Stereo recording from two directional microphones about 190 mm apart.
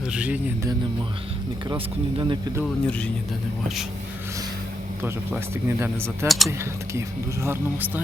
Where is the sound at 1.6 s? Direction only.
25° right (ahead or behind).